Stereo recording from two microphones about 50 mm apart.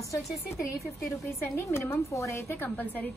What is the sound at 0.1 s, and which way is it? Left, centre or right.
Speech, left.